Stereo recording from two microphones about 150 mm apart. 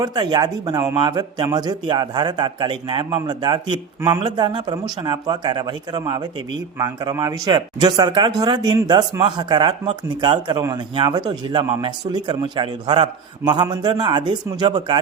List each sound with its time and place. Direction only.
0.0 s speech: 30° right (ahead or behind)